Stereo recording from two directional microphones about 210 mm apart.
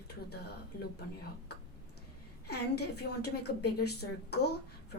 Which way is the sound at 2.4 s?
50° left (ahead or behind).